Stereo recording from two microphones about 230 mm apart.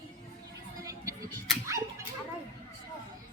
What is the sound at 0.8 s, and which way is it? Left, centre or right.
Music, centre.